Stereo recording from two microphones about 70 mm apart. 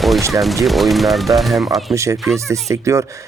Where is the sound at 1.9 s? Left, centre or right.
Right.